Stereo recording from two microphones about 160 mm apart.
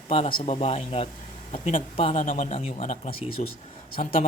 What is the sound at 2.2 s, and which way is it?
Speech, 55° left (ahead or behind).